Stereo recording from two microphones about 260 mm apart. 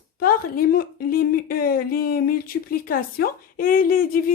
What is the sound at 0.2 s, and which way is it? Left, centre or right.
Speech, left.